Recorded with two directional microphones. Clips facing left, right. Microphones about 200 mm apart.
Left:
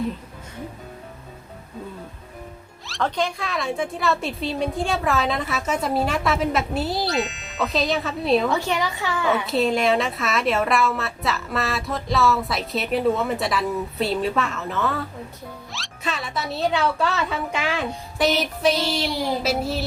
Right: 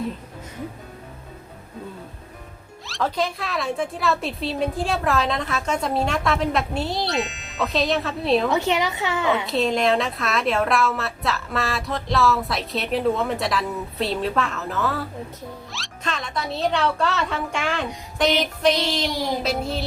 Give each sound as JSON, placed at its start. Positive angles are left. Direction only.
{"t": 2.8, "sound": "speech", "side_deg": 0}
{"t": 8.4, "sound": "a woman's voice", "side_deg": -20}
{"t": 9.5, "sound": "speech", "side_deg": 0}
{"t": 18.9, "sound": "child singing", "side_deg": 10}
{"t": 19.4, "sound": "speech", "side_deg": 5}